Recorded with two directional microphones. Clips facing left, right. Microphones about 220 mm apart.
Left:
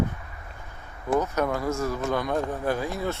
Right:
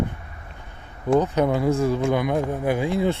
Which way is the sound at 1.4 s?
20° right (ahead or behind).